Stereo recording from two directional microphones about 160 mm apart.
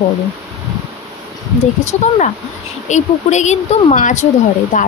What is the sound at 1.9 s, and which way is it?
Speech, 45° left (ahead or behind).